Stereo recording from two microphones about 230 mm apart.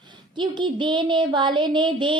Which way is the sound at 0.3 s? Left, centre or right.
Centre.